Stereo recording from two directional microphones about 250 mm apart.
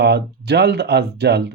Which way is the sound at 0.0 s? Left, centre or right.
Right.